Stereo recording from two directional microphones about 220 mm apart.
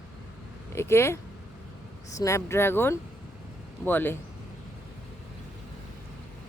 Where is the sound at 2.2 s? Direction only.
15° left (ahead or behind).